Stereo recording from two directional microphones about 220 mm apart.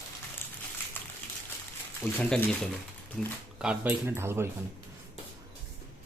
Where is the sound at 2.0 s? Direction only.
10° left (ahead or behind); by 4.4 s 10° right (ahead or behind).